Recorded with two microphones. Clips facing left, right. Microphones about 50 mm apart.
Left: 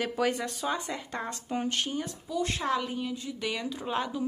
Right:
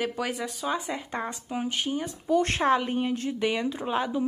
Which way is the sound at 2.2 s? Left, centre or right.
Right.